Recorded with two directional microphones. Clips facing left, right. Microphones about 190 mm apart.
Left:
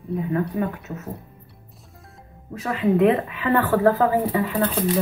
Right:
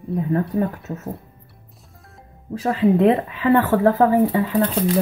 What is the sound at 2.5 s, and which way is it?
A woman's voice, 30° right (ahead or behind).